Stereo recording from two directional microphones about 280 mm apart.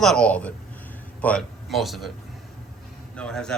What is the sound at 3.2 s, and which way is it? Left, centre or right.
Speech, centre.